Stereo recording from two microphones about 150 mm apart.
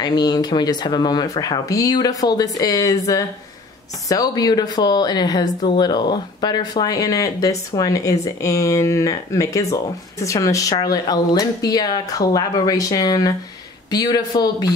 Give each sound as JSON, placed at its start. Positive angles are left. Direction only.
{"t": 0.0, "sound": "speech", "side_deg": 25}